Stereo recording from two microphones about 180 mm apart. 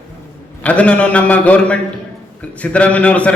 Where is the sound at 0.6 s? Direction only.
5° left (ahead or behind).